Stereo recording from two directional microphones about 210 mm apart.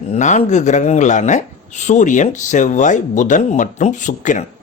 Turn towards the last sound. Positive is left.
turn(degrees=35)  # may be behind; listen again after turning